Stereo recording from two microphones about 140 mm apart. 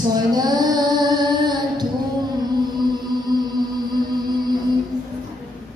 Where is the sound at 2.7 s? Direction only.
30° right (ahead or behind).